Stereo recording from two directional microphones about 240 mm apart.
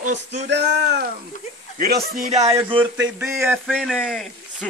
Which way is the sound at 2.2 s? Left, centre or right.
Right.